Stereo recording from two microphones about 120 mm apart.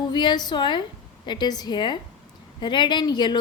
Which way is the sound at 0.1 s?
40° left (ahead or behind).